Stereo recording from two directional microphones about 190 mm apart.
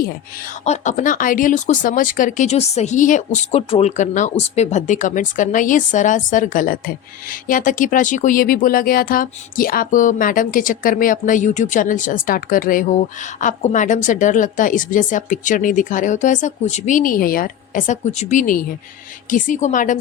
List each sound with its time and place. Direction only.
0.6 s a woman's voice: 40° left (ahead or behind)